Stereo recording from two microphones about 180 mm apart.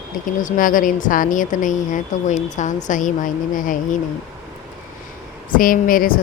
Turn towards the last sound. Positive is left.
turn(degrees=50)  # may be behind; listen again after turning